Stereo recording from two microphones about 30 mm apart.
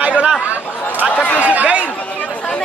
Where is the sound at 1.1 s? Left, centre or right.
Left.